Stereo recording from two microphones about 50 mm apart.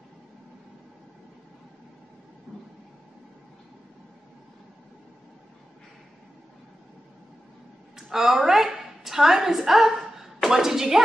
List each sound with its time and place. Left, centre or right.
2.5 s train: right
8.1 s a woman's voice: centre